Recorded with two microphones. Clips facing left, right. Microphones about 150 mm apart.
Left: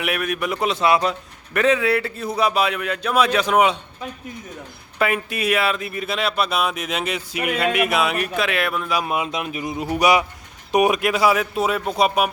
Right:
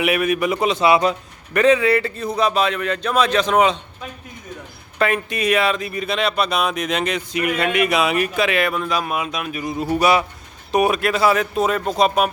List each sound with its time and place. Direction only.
0.0 s speech: centre (ahead or behind)
4.9 s speech: 5° left (ahead or behind)
9.0 s speech: 20° left (ahead or behind)